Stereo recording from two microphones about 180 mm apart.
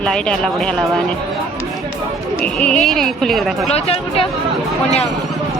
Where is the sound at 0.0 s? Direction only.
5° left (ahead or behind).